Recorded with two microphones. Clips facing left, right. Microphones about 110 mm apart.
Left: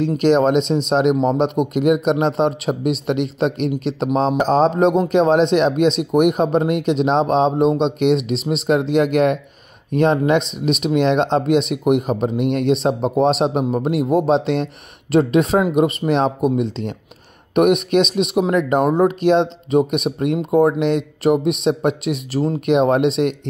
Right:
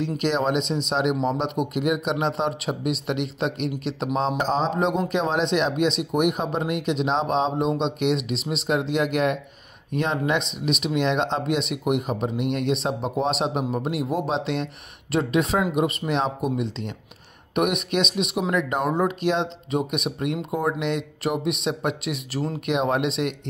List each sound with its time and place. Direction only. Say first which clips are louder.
0.0 s a man's voice: left 8 dB; 45° left (ahead or behind); by 22.6 s 25° left (ahead or behind)
22.7 s a man's voice: left 8 dB; 35° left (ahead or behind)